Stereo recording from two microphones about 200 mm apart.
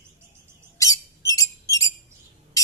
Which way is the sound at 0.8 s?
15° left (ahead or behind).